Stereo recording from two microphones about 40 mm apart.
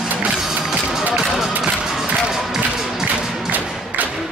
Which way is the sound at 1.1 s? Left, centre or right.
Centre.